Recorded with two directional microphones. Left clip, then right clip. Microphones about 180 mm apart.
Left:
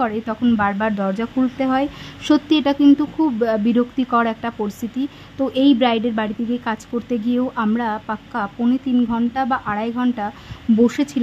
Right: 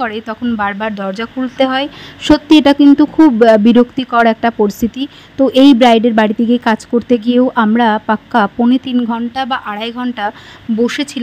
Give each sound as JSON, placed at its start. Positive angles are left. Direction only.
{"t": 0.0, "sound": "speech", "side_deg": -30}